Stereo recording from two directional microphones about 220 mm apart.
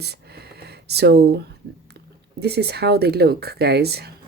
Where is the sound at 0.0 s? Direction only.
50° right (ahead or behind).